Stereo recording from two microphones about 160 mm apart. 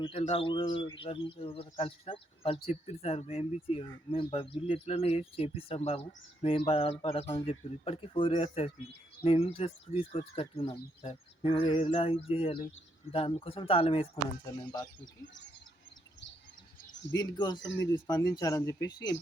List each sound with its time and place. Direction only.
0.0 s speech: 35° left (ahead or behind)
14.4 s speech: 25° left (ahead or behind)
17.2 s speech: 25° left (ahead or behind)